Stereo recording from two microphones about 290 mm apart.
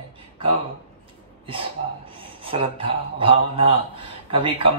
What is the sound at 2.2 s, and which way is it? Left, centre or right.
A man's voice, centre.